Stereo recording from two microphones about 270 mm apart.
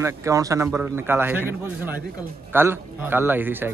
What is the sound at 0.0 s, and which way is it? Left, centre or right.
A man's voice, centre.